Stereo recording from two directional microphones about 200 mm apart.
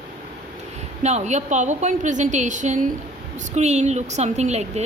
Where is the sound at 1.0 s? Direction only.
35° right (ahead or behind).